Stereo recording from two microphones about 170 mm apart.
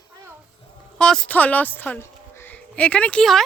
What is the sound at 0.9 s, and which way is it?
Speech, 5° left (ahead or behind).